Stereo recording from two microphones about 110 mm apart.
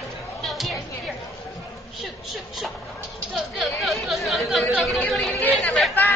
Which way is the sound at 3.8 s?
Centre (ahead or behind).